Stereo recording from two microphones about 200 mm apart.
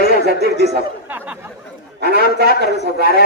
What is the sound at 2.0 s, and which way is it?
Speech, 55° right (ahead or behind).